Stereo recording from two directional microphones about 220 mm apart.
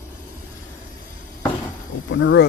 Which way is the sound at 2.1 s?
55° left (ahead or behind).